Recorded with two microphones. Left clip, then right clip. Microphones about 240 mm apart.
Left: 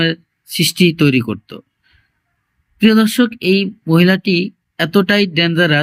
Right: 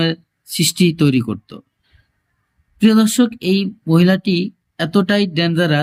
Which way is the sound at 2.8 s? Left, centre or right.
Centre.